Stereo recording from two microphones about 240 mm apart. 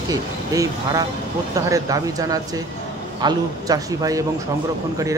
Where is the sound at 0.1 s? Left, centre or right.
Centre.